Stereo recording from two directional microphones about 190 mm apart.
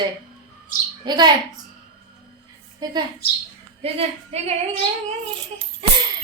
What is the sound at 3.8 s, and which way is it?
Speech, 35° right (ahead or behind).